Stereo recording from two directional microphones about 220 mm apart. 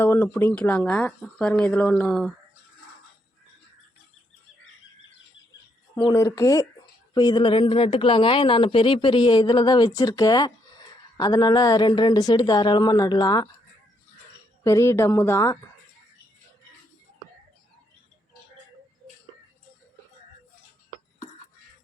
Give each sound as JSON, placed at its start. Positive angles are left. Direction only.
{"t": 0.0, "sound": "speech", "side_deg": 10}
{"t": 6.0, "sound": "a woman's voice", "side_deg": 20}
{"t": 14.6, "sound": "speech", "side_deg": 15}